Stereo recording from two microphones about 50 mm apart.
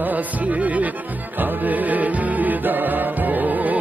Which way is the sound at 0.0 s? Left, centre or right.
Right.